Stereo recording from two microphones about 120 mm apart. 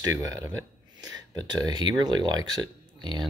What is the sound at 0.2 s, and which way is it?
Speech, 30° right (ahead or behind).